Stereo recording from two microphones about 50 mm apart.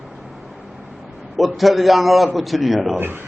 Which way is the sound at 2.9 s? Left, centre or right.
Right.